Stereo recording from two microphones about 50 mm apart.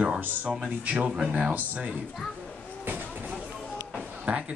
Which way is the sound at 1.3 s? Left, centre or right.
Right.